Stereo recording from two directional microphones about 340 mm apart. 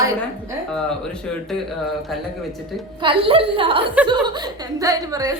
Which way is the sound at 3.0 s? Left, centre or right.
Centre.